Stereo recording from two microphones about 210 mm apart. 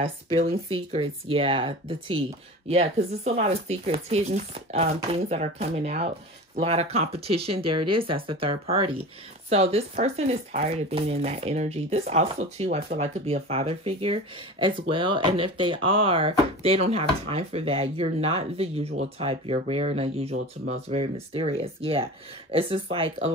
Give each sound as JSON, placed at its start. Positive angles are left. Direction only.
{"t": 0.0, "sound": "speech", "side_deg": -30}
{"t": 3.3, "sound": "speech", "side_deg": -30}